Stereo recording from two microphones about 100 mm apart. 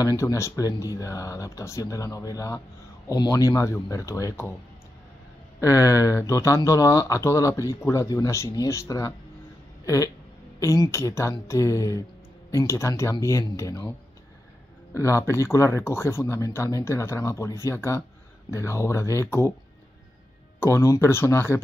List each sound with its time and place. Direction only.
0.0 s speech: 35° left (ahead or behind)
5.6 s speech: 30° left (ahead or behind)
15.0 s speech: 30° left (ahead or behind)
20.6 s speech: 25° left (ahead or behind)